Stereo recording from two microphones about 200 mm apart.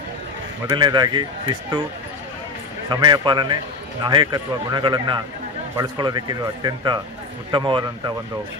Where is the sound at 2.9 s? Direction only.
20° right (ahead or behind).